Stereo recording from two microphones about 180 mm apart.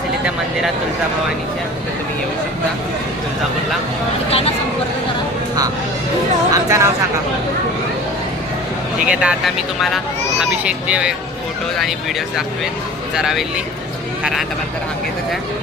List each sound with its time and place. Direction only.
4.3 s speech: 35° left (ahead or behind)
6.5 s speech: 15° right (ahead or behind)
9.0 s speech: 5° right (ahead or behind)
13.1 s speech: 5° right (ahead or behind)